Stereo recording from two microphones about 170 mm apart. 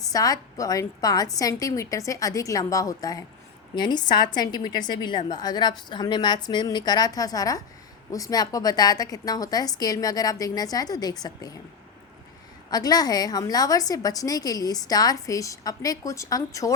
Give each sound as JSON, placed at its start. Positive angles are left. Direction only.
{"t": 0.1, "sound": "a woman's voice", "side_deg": 20}
{"t": 12.7, "sound": "a woman's voice", "side_deg": 20}